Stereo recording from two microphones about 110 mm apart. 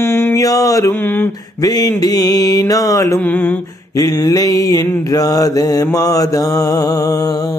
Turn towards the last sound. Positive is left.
turn(degrees=30)  # may be behind; listen again after turning